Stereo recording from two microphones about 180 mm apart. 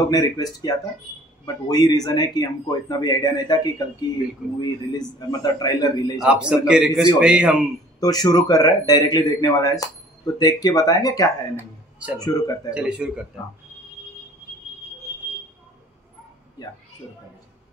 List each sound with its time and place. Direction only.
0.1 s a man's voice: 20° left (ahead or behind)
6.1 s a man's voice: 5° right (ahead or behind)
8.0 s a man's voice: 20° left (ahead or behind)
12.7 s speech: 5° right (ahead or behind)
16.6 s a woman's voice: 20° left (ahead or behind)